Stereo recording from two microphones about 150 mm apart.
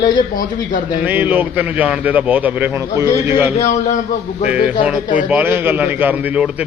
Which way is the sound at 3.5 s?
50° left (ahead or behind).